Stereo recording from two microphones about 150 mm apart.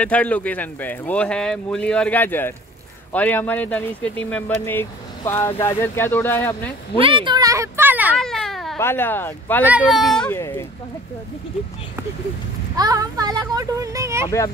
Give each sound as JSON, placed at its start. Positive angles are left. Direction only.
{"t": 0.0, "sound": "speech", "side_deg": 10}
{"t": 7.0, "sound": "speech", "side_deg": -35}
{"t": 8.2, "sound": "baby cry", "side_deg": 5}
{"t": 8.7, "sound": "speech", "side_deg": 15}
{"t": 9.7, "sound": "speech", "side_deg": -10}
{"t": 10.0, "sound": "speech", "side_deg": 5}
{"t": 10.3, "sound": "speech", "side_deg": 15}
{"t": 12.7, "sound": "speech", "side_deg": -25}